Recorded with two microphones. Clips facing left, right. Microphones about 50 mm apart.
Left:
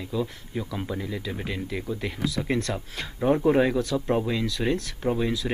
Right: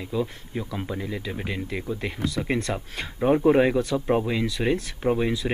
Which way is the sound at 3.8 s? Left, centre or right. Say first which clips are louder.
Right 2 dB; centre.